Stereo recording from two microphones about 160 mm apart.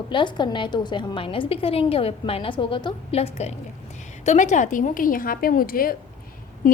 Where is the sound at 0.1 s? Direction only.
30° left (ahead or behind).